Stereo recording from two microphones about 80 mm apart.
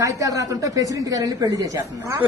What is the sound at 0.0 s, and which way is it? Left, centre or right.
A man's voice, right.